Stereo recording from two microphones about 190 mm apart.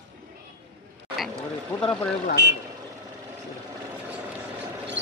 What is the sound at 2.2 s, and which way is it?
Speech, 55° left (ahead or behind).